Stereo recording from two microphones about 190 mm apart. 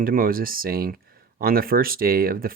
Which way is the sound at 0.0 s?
50° right (ahead or behind).